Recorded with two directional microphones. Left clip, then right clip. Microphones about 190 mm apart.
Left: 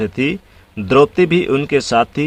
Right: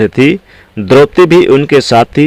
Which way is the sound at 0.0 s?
30° right (ahead or behind).